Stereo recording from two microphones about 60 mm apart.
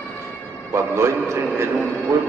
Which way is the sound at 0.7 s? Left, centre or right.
Right.